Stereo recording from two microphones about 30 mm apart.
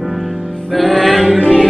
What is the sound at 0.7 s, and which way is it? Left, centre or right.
Music, centre.